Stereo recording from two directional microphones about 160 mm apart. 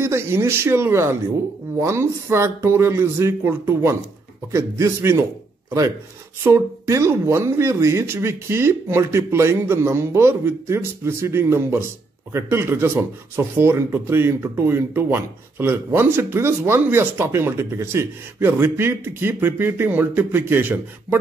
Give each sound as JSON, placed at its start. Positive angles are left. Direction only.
{"t": 0.0, "sound": "a man's voice", "side_deg": -15}
{"t": 6.4, "sound": "speech", "side_deg": -20}